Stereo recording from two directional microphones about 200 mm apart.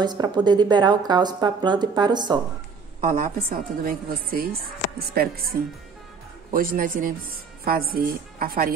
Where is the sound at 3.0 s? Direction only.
40° right (ahead or behind).